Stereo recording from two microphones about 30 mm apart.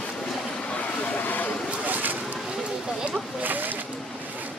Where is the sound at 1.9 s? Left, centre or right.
Right.